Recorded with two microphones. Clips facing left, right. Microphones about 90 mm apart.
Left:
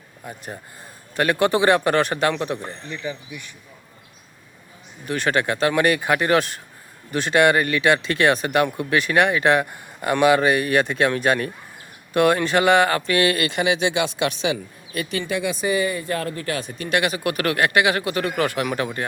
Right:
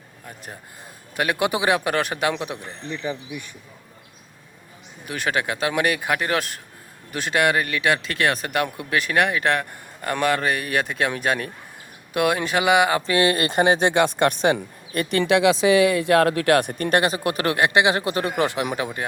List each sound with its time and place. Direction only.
0.3 s speech: 5° left (ahead or behind)
1.1 s a man's voice: 5° right (ahead or behind)
2.9 s speech: 25° right (ahead or behind)
5.0 s speech: 5° right (ahead or behind)
13.1 s speech: 25° right (ahead or behind); by 15.2 s 55° right (ahead or behind)
15.2 s speech: 90° right; by 17.0 s 50° right (ahead or behind)
17.0 s speech: 30° right (ahead or behind)